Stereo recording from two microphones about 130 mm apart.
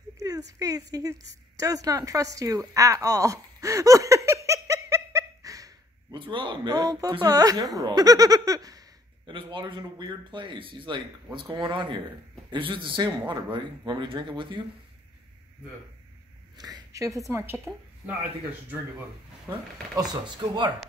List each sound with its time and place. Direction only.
0.2 s a woman's voice: 25° right (ahead or behind)
6.1 s speech: 40° right (ahead or behind)
16.5 s a sound: 30° right (ahead or behind)
17.2 s a woman's voice: 20° right (ahead or behind)
19.5 s a woman's voice: 25° right (ahead or behind)